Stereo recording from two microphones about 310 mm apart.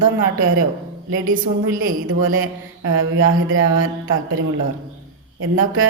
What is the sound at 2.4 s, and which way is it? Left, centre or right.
Mantra, right.